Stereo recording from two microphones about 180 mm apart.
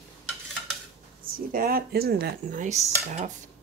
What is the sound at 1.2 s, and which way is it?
Speech, 55° right (ahead or behind).